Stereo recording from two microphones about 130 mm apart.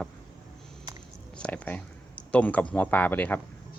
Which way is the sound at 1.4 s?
10° left (ahead or behind).